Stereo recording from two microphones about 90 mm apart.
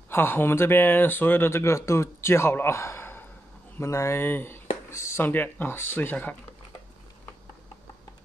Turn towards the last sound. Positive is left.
turn(degrees=20)  # may be behind; listen again after turning